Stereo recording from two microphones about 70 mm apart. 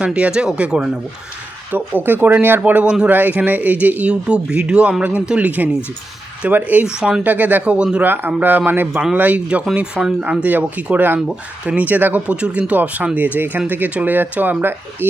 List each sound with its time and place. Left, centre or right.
0.0 s speech: centre
1.7 s speech: right
6.8 s speech: centre
7.3 s speech: right
8.9 s speech: centre
9.1 s speech: right
10.2 s speech: right